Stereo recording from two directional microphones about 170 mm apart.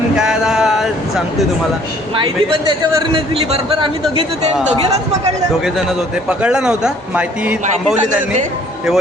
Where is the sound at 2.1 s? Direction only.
30° right (ahead or behind).